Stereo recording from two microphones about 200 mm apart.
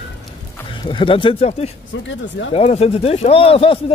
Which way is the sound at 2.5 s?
30° left (ahead or behind).